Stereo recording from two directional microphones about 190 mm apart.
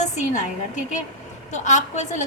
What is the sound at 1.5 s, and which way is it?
Speech, 40° left (ahead or behind).